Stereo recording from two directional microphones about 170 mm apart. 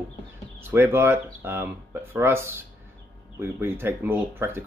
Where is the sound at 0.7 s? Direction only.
15° right (ahead or behind).